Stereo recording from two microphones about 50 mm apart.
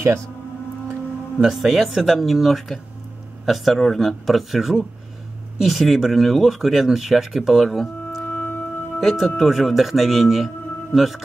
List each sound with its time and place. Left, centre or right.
1.5 s speech: centre
8.3 s music: left
9.0 s speech: centre